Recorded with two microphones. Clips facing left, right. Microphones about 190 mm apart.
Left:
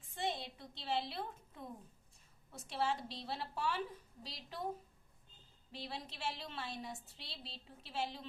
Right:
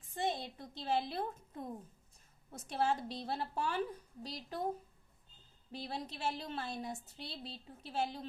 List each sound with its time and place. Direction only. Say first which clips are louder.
0.1 s a woman's voice: right 3 dB; 45° right (ahead or behind)
5.7 s a woman's voice: right 4 dB; 45° right (ahead or behind)